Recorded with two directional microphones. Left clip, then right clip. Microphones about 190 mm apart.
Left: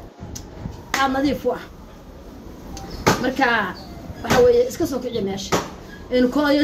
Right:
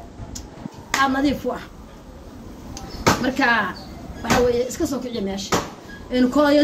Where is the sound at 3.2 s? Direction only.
15° right (ahead or behind).